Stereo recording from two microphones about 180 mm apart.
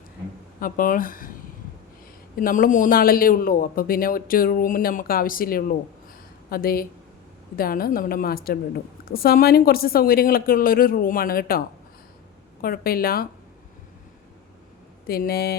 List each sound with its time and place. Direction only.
0.6 s a man's voice: 50° left (ahead or behind)
2.3 s a man's voice: 50° left (ahead or behind)
12.6 s a woman's voice: 55° left (ahead or behind)
15.0 s a woman's voice: 55° left (ahead or behind)